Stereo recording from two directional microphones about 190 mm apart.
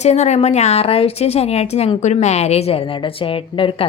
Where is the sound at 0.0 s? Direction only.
35° left (ahead or behind).